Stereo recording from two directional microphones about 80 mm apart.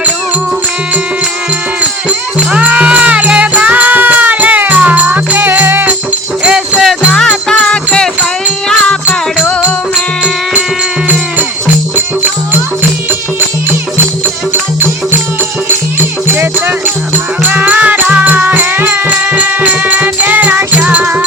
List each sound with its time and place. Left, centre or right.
2.0 s music: centre
6.4 s music: centre
7.1 s music: centre
16.2 s music: right
20.8 s music: centre